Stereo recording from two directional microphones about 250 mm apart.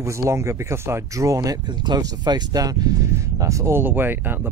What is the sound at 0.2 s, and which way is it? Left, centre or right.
Speech, centre.